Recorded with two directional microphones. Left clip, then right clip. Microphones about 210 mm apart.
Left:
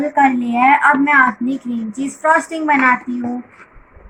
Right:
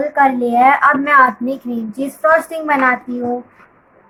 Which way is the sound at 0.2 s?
25° right (ahead or behind).